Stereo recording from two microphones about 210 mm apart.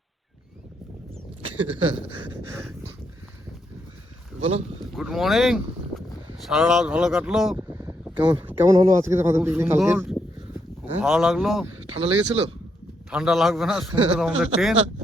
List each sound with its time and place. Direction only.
4.4 s speech: 30° right (ahead or behind)
4.8 s a man's voice: centre (ahead or behind)
7.5 s a sound: 15° right (ahead or behind)
8.4 s a man's voice: 10° right (ahead or behind)
11.9 s speech: 30° right (ahead or behind)
13.1 s a man's voice: 5° right (ahead or behind)